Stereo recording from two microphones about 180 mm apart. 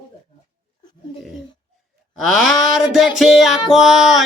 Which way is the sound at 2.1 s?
Centre (ahead or behind).